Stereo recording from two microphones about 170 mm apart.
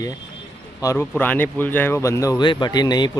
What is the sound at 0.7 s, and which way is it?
Speech, 20° left (ahead or behind).